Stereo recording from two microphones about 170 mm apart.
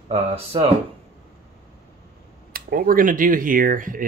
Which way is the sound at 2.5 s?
60° right (ahead or behind).